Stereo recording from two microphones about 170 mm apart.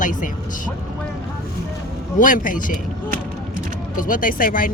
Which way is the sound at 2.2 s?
50° left (ahead or behind).